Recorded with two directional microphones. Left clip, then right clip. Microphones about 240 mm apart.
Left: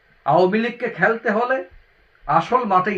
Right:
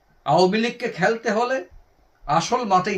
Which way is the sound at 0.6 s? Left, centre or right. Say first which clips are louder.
Left 2 dB; centre.